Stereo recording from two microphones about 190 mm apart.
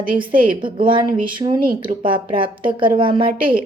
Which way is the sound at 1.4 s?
35° right (ahead or behind).